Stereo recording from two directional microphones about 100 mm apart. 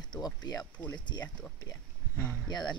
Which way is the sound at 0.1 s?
40° left (ahead or behind).